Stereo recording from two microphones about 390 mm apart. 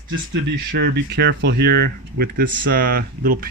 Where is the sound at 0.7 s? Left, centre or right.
Right.